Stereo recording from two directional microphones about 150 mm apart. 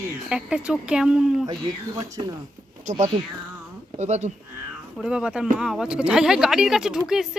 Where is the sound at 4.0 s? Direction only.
50° right (ahead or behind).